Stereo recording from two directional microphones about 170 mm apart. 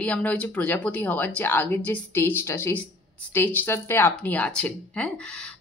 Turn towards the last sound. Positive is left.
turn(degrees=5)  # may be behind; listen again after turning